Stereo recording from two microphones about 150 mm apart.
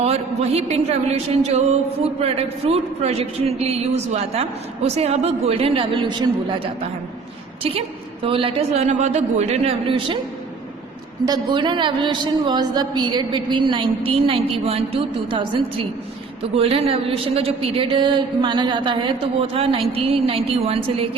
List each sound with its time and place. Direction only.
0.0 s a sound: 45° right (ahead or behind)
2.2 s a woman's voice: 40° right (ahead or behind)
8.2 s a woman's voice: 35° right (ahead or behind)
11.3 s a woman's voice: 30° right (ahead or behind)
16.6 s a woman's voice: 40° right (ahead or behind)